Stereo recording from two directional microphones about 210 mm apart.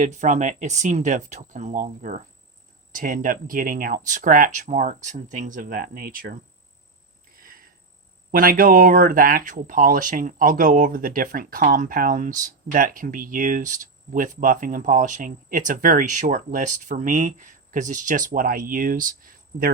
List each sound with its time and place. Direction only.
0.0 s speech: 35° right (ahead or behind)
7.3 s cricket: 45° right (ahead or behind)
8.3 s speech: 40° right (ahead or behind)